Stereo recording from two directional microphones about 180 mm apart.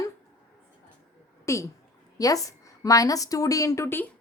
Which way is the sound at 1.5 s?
15° left (ahead or behind).